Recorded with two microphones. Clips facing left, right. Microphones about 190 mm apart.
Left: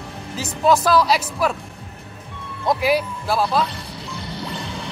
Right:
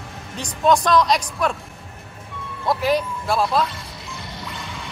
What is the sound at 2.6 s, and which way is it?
Speech, 15° left (ahead or behind).